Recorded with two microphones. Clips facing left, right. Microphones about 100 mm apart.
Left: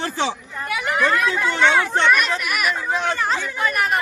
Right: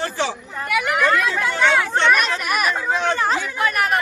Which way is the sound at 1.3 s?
20° left (ahead or behind).